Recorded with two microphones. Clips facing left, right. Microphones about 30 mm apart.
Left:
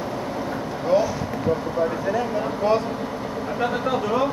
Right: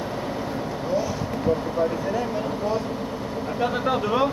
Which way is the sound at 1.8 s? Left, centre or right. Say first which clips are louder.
Left 1 dB; centre.